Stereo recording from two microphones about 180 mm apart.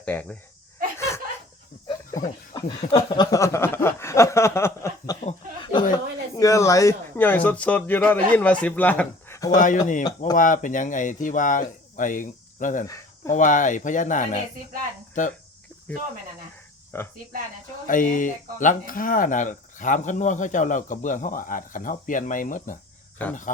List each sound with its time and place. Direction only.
0.0 s speech: 10° left (ahead or behind)
0.9 s a sound: 15° left (ahead or behind)
1.9 s speech: 20° left (ahead or behind)
9.6 s speech: 45° left (ahead or behind)
16.9 s speech: 10° left (ahead or behind)
17.8 s speech: 45° left (ahead or behind)
23.2 s speech: 10° left (ahead or behind)